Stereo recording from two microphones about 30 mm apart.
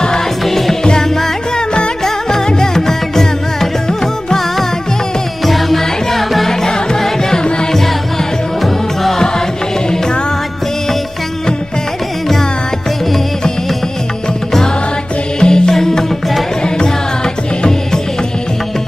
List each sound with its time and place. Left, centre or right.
0.5 s music: centre
2.0 s music: centre
5.5 s music: centre
15.4 s music: left